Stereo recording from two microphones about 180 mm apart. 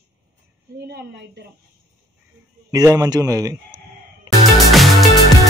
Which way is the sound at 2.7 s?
20° right (ahead or behind).